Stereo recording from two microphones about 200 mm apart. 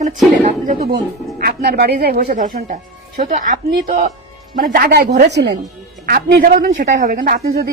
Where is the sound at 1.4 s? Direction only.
50° right (ahead or behind).